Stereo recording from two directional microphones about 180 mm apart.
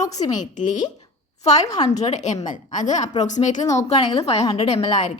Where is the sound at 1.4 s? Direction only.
40° left (ahead or behind).